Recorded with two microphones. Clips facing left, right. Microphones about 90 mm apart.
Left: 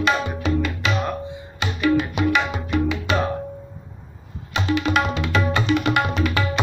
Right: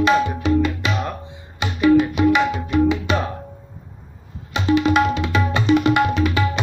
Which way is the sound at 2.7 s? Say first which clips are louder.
Right 4 dB; 25° right (ahead or behind).